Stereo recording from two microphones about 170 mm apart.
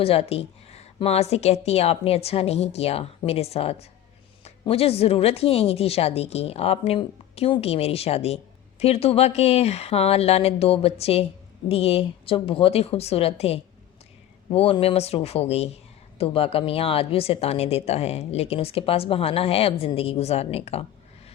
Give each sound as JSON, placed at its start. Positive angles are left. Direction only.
{"t": 0.0, "sound": "speech", "side_deg": 35}